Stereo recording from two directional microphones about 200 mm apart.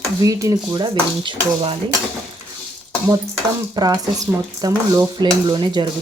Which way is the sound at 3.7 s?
15° right (ahead or behind).